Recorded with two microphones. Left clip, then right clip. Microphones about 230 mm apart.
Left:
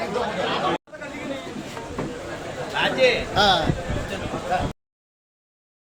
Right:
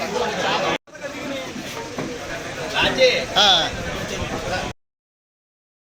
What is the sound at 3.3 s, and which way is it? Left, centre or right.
Speech, centre.